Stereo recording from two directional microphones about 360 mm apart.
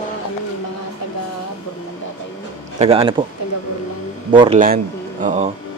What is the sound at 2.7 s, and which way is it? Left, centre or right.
Speech, centre.